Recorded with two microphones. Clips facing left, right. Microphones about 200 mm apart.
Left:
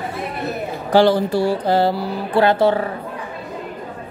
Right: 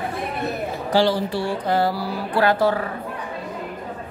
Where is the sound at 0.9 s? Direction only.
55° left (ahead or behind); by 2.8 s 25° left (ahead or behind).